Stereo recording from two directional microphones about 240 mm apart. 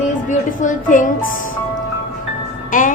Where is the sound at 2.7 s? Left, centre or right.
Left.